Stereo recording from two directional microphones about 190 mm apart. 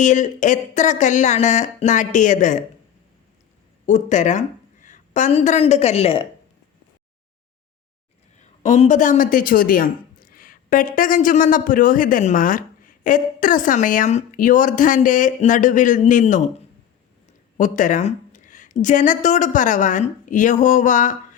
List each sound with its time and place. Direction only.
0.0 s speech: 40° left (ahead or behind)
3.8 s a woman's voice: 40° left (ahead or behind)
8.4 s speech: 40° left (ahead or behind)
17.6 s speech: 45° left (ahead or behind)